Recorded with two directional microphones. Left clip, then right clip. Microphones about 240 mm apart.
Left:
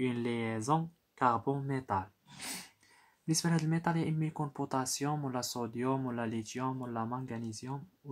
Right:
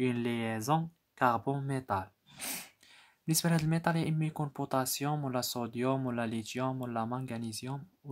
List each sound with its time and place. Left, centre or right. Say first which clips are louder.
0.0 s speech: right 1 dB; right